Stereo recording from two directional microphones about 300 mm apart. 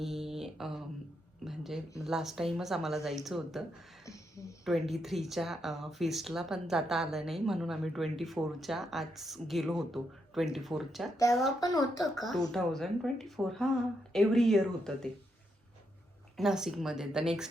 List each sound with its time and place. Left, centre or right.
0.0 s mantra: centre
1.5 s a sound: centre
2.0 s speech: centre
4.0 s a sound: centre
4.6 s speech: centre
11.6 s speech: centre
12.5 s speech: centre
16.4 s speech: centre